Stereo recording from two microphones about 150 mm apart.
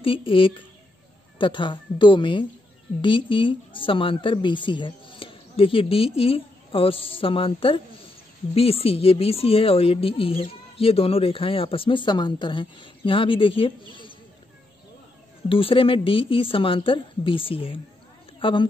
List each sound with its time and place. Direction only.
0.0 s speech: 35° left (ahead or behind)
15.4 s a woman's voice: 35° left (ahead or behind)